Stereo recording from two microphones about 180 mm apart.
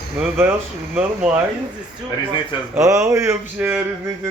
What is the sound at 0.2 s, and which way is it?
Speech, 10° right (ahead or behind).